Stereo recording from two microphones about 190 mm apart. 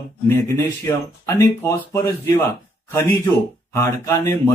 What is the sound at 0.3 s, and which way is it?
Speech, 15° left (ahead or behind).